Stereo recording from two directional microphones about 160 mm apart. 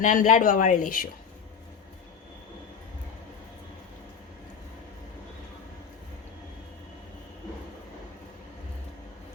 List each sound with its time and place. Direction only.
0.0 s speech: 50° left (ahead or behind)